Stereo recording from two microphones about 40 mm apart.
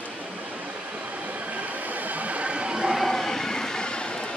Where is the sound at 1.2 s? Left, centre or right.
Right.